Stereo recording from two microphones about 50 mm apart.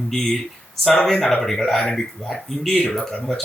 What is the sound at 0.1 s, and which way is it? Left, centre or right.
Speech, centre.